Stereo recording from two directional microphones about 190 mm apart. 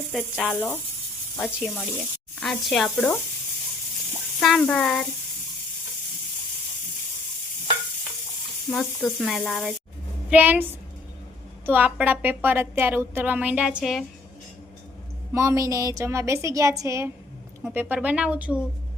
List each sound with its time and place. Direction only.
0.1 s speech: centre (ahead or behind)
4.4 s speech: 5° left (ahead or behind)
8.7 s speech: centre (ahead or behind)
10.2 s a woman's voice: 10° right (ahead or behind)
15.3 s a woman's voice: 15° right (ahead or behind)